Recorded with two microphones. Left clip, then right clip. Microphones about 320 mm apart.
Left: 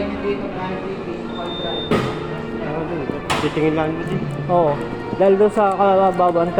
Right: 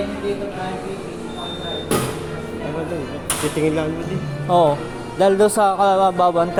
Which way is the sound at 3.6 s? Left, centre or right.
Right.